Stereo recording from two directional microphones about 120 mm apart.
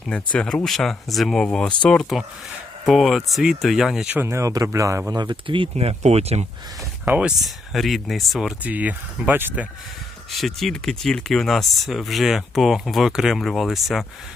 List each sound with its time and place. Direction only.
0.1 s speech: 10° left (ahead or behind)
4.1 s speech: 20° right (ahead or behind)
5.1 s speech: 40° right (ahead or behind)
5.7 s speech: 65° right (ahead or behind)
7.0 s speech: 10° right (ahead or behind)
10.3 s speech: centre (ahead or behind)